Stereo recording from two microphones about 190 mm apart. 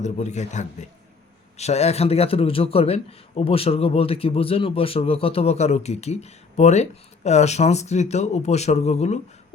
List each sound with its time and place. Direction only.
0.0 s a man's voice: 40° left (ahead or behind)